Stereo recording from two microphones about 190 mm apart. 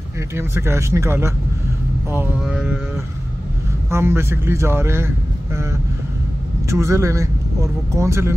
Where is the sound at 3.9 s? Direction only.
15° right (ahead or behind).